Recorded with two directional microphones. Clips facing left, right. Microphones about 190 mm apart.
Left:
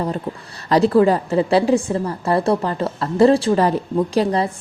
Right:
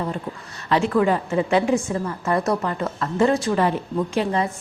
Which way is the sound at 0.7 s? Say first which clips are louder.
Left 5 dB; 35° left (ahead or behind).